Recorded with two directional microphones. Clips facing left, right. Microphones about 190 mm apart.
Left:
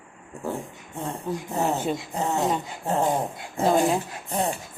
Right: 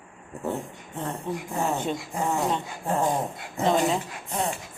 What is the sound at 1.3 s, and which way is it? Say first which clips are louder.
Speech: left 2 dB; centre (ahead or behind).